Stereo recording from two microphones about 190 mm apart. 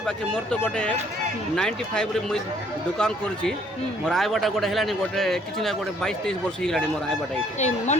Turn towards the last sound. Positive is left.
turn(degrees=35)  # may be behind; listen again after turning